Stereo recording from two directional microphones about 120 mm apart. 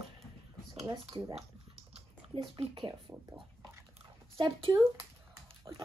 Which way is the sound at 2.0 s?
45° right (ahead or behind).